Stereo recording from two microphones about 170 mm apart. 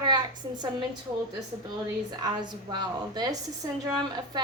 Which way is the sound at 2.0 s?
25° right (ahead or behind).